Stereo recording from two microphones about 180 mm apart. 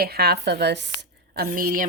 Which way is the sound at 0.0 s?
60° right (ahead or behind).